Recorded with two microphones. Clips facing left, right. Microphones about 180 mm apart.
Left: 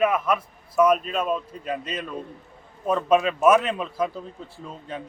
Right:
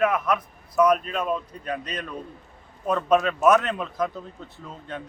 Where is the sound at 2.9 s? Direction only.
5° left (ahead or behind).